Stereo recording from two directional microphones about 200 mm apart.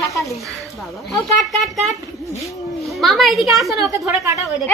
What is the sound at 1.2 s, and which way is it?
Speech, centre (ahead or behind).